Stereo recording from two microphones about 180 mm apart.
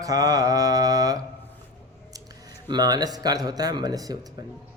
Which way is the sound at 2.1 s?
20° right (ahead or behind).